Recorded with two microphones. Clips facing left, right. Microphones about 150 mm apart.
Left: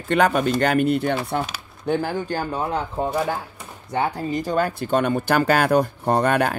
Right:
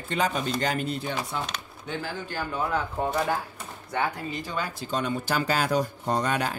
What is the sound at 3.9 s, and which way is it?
Speech, 35° left (ahead or behind).